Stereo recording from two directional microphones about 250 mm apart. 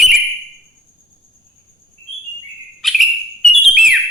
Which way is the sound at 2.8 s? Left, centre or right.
Centre.